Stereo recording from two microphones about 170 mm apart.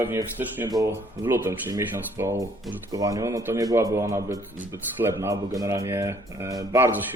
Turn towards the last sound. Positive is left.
turn(degrees=-20)  # may be behind; listen again after turning